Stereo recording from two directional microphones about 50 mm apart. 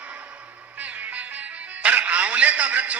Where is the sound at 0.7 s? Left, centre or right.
Right.